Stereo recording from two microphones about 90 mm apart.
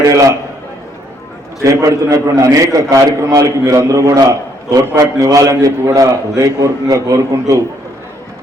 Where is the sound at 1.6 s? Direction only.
40° right (ahead or behind).